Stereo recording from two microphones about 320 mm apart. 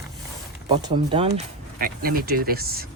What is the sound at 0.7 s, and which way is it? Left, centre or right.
Speech, centre.